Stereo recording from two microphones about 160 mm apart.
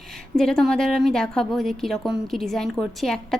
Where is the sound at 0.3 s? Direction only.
5° left (ahead or behind).